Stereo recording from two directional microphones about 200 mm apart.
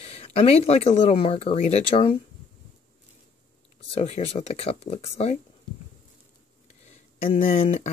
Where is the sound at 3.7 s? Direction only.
30° left (ahead or behind).